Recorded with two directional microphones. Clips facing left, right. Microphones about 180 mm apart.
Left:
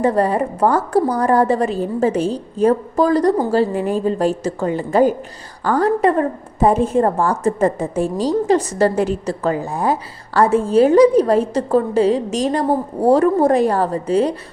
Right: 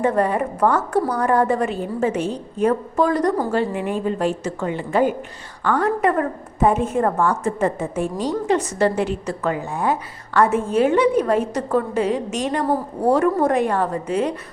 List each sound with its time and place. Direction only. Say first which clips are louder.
0.0 s a woman's voice: left 3 dB; 35° left (ahead or behind)